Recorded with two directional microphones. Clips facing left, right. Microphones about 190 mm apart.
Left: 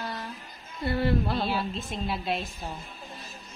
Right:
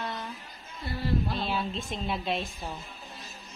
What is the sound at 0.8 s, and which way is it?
Music, 60° left (ahead or behind).